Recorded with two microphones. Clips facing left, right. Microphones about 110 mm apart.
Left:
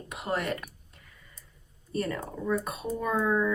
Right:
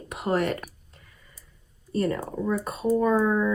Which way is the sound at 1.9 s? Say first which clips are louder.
Right 5 dB; 30° right (ahead or behind).